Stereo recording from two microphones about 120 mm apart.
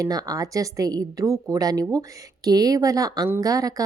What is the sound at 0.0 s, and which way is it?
A woman's voice, 30° right (ahead or behind).